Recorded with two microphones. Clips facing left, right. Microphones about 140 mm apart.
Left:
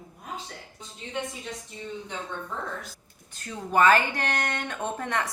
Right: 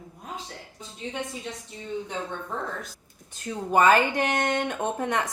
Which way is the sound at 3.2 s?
20° right (ahead or behind).